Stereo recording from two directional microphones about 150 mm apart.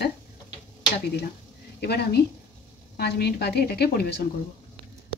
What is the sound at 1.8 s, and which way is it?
Speech, 90° left.